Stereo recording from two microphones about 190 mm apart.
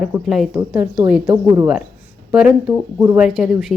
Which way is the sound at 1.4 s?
15° right (ahead or behind).